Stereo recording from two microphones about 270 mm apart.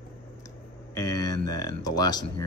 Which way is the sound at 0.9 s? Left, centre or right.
Centre.